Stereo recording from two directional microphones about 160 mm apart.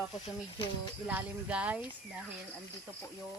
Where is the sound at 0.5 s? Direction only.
30° left (ahead or behind).